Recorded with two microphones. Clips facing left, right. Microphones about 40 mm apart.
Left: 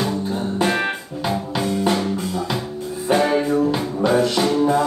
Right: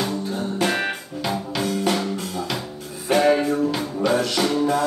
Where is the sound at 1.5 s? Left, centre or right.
Left.